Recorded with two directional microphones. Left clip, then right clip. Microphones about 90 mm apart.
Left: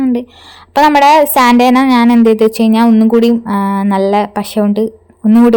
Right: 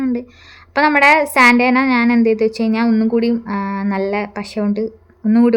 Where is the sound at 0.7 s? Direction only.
35° left (ahead or behind).